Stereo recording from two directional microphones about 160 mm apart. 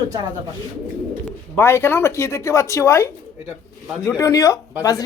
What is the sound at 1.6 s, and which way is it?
Speech, 15° left (ahead or behind).